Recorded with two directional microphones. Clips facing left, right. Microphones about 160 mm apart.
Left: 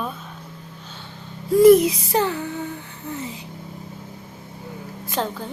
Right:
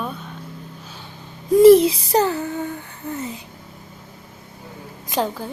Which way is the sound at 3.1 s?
50° right (ahead or behind).